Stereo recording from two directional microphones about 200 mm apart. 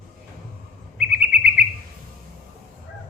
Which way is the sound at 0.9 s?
5° right (ahead or behind).